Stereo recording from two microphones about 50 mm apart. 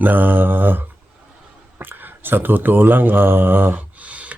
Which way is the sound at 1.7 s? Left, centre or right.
Right.